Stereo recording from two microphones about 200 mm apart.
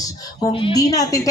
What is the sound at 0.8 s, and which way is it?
Speech, 15° left (ahead or behind).